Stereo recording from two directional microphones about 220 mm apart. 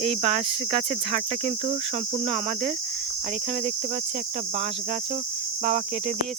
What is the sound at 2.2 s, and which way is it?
Insect, 30° right (ahead or behind).